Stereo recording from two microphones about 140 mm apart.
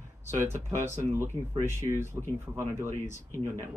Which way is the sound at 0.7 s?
60° right (ahead or behind).